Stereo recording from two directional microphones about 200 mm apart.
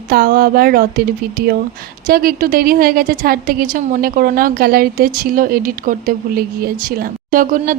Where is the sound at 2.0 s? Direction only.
45° right (ahead or behind).